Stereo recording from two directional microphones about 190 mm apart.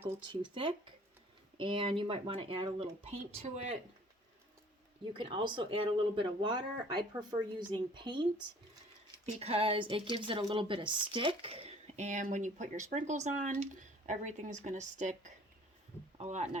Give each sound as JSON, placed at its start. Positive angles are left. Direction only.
{"t": 0.3, "sound": "speech", "side_deg": -25}
{"t": 5.1, "sound": "speech", "side_deg": -25}